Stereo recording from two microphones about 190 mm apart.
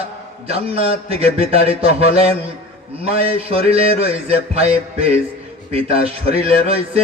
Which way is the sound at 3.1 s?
50° left (ahead or behind).